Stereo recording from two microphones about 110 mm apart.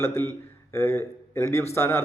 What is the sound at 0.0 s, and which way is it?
A man's voice, 20° left (ahead or behind).